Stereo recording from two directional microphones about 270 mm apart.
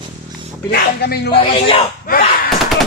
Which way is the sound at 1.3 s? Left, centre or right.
Centre.